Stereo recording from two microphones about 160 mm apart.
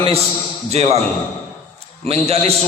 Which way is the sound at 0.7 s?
40° right (ahead or behind).